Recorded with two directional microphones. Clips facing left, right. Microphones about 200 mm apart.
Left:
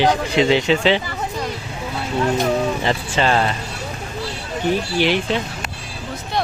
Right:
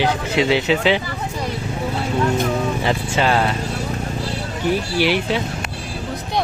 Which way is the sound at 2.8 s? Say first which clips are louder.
Even; 10° right (ahead or behind).